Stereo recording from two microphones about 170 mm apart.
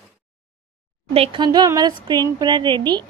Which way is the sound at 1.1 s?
35° right (ahead or behind).